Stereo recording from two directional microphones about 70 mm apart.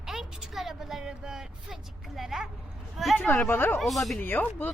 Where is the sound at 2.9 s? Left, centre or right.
Centre.